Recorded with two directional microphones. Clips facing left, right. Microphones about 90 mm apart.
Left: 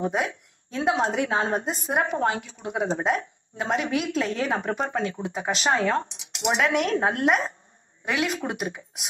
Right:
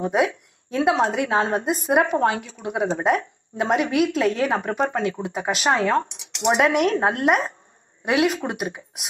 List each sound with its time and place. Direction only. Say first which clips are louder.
0.1 s speech: right 6 dB; 55° right (ahead or behind)
4.5 s speech: right 4 dB; 40° right (ahead or behind)
6.4 s speech: right 5 dB; 35° right (ahead or behind)
6.7 s speech: right 3 dB; 50° right (ahead or behind)